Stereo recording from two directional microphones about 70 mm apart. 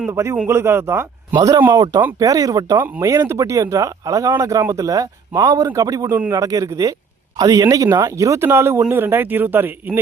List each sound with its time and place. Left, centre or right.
0.1 s a man's voice: right
1.4 s speech: right
2.7 s speech: right
3.0 s speech: right
7.3 s a man's voice: right